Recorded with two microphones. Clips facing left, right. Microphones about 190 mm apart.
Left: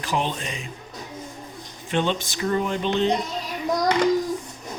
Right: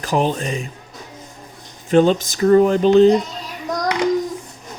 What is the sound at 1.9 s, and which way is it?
Speech, 40° right (ahead or behind).